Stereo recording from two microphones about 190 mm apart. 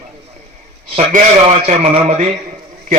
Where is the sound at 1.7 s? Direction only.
35° right (ahead or behind).